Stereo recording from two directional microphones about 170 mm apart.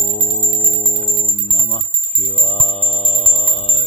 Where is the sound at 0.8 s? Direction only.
35° left (ahead or behind).